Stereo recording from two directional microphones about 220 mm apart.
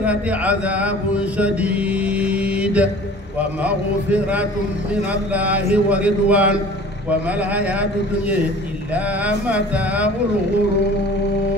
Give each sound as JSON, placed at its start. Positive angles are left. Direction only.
{"t": 0.0, "sound": "mantra", "side_deg": -5}
{"t": 3.6, "sound": "speech", "side_deg": -5}